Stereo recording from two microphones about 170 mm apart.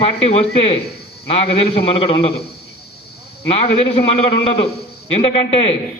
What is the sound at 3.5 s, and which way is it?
A man's voice, 35° left (ahead or behind).